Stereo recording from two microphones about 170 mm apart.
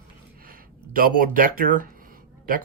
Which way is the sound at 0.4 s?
55° right (ahead or behind).